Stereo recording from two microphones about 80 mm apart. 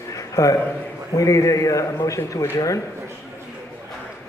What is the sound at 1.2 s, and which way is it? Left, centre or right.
A man's voice, left.